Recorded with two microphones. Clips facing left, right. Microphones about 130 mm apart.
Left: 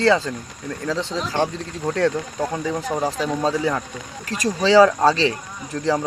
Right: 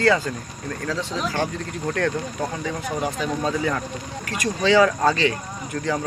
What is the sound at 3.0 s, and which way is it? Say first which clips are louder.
Speech: left 2 dB; 30° left (ahead or behind).